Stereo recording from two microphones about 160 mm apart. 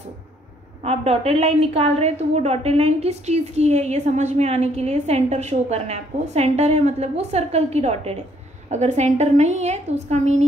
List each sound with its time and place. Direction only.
0.8 s a woman's voice: 40° right (ahead or behind)